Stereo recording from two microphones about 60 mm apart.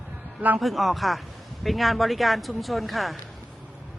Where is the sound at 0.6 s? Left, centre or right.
Centre.